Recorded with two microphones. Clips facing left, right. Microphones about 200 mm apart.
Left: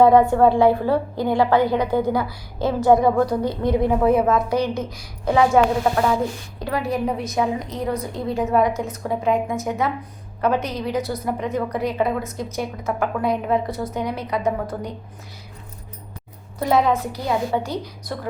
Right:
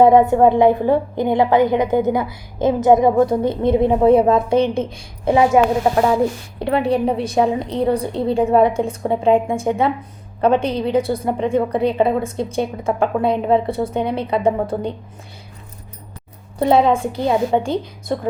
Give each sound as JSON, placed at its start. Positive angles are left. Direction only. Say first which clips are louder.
{"t": 0.0, "sound": "a woman's voice", "louder": "right 2 dB", "side_deg": -20}
{"t": 16.6, "sound": "a woman's voice", "louder": "right 4 dB", "side_deg": -30}